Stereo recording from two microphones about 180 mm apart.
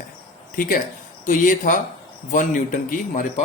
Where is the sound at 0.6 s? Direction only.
50° left (ahead or behind).